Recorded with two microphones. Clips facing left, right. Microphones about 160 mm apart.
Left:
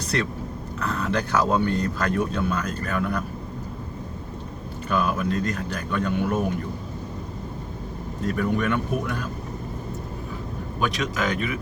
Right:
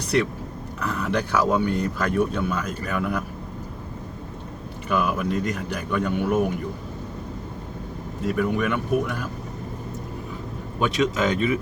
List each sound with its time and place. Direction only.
0.8 s speech: 10° right (ahead or behind)
4.9 s speech: 10° right (ahead or behind)
8.2 s speech: 5° right (ahead or behind)
10.8 s speech: 25° right (ahead or behind)